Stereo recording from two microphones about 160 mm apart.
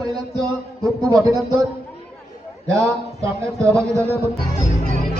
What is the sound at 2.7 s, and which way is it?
A man's voice, 20° right (ahead or behind).